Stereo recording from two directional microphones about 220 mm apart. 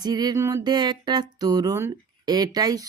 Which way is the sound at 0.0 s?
20° right (ahead or behind).